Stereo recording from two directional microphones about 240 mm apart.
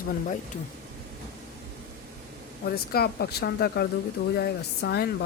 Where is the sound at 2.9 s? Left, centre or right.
Left.